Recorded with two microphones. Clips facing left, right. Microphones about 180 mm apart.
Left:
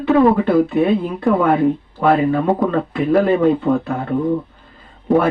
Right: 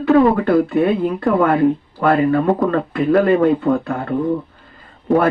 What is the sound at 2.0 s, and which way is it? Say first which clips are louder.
Speech: even; 10° left (ahead or behind).